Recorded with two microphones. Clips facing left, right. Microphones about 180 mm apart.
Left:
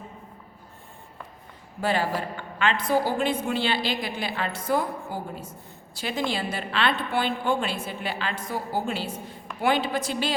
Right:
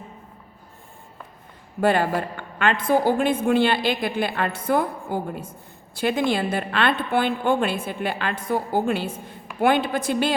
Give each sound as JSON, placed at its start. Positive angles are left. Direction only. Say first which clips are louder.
{"t": 1.8, "sound": "a woman's voice", "louder": "right 5 dB", "side_deg": -55}